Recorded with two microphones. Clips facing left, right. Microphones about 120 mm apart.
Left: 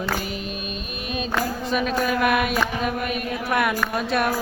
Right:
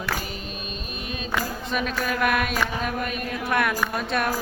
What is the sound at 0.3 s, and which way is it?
Music, 35° right (ahead or behind).